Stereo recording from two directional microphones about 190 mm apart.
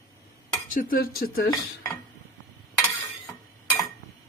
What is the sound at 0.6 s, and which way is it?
Speech, 45° left (ahead or behind).